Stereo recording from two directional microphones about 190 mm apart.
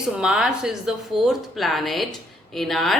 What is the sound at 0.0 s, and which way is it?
A woman's voice, 5° right (ahead or behind).